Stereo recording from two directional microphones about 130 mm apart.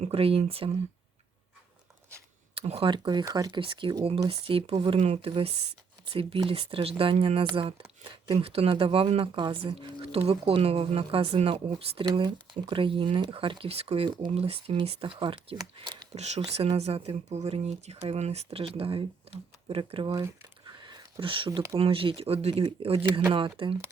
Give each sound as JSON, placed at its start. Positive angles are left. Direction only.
{"t": 0.1, "sound": "speech", "side_deg": -45}
{"t": 2.6, "sound": "speech", "side_deg": -50}
{"t": 12.0, "sound": "speech", "side_deg": -35}
{"t": 16.1, "sound": "speech", "side_deg": -60}
{"t": 20.1, "sound": "a sound", "side_deg": -30}
{"t": 21.8, "sound": "speech", "side_deg": -45}